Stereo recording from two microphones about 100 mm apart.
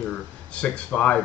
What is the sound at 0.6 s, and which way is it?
Speech, 10° left (ahead or behind).